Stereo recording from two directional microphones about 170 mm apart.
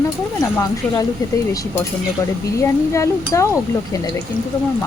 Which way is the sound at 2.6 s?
20° left (ahead or behind).